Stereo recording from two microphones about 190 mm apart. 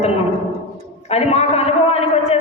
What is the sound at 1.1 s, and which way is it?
A woman's voice, 35° left (ahead or behind).